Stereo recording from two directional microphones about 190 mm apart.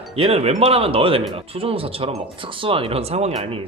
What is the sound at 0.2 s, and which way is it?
Speech, 30° right (ahead or behind).